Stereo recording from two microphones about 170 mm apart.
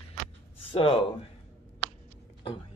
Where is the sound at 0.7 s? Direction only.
30° left (ahead or behind).